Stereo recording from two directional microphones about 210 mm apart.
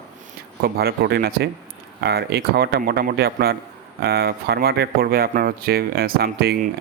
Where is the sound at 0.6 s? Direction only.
45° right (ahead or behind).